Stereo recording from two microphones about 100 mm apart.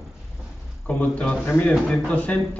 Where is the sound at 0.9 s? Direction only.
15° left (ahead or behind).